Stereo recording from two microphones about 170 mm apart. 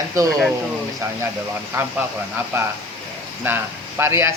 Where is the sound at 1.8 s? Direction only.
15° right (ahead or behind).